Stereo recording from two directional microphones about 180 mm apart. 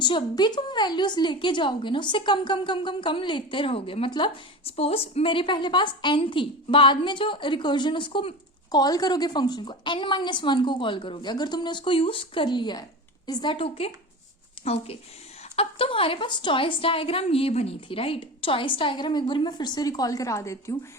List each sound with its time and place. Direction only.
0.0 s a woman's voice: 25° left (ahead or behind)